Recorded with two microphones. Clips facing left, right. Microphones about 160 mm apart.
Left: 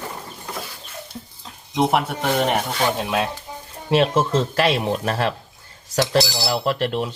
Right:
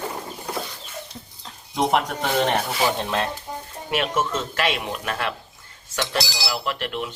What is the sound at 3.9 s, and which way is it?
Speech, 30° left (ahead or behind).